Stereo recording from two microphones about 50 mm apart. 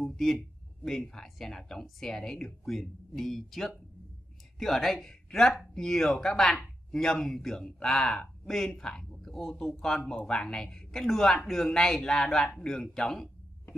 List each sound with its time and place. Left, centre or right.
0.1 s speech: centre